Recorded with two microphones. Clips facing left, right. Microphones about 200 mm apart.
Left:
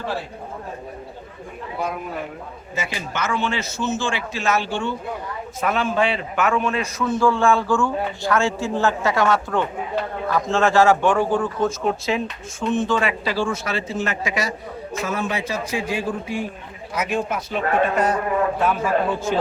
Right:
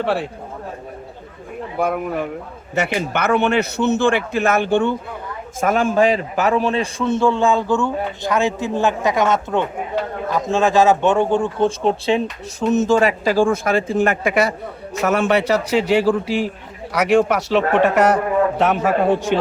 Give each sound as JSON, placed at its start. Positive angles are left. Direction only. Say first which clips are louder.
{"t": 0.0, "sound": "speech", "louder": "right 7 dB", "side_deg": -80}
{"t": 2.7, "sound": "a man's voice", "louder": "right 8 dB", "side_deg": -65}
{"t": 15.0, "sound": "a man's voice", "louder": "right 9 dB", "side_deg": -70}